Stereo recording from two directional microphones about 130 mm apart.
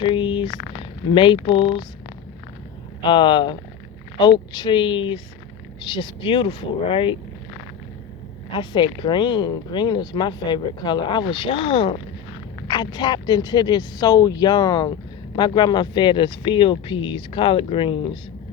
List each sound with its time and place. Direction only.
0.0 s speech: 45° left (ahead or behind)
3.0 s speech: 40° left (ahead or behind)
8.5 s speech: 40° left (ahead or behind)